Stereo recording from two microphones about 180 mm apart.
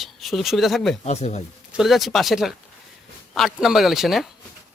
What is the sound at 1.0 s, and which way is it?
Speech, 40° left (ahead or behind).